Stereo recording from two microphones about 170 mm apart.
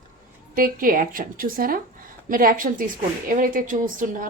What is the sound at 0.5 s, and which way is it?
A woman's voice, 55° right (ahead or behind).